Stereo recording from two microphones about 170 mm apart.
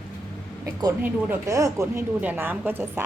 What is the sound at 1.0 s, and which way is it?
A woman's voice, 15° right (ahead or behind).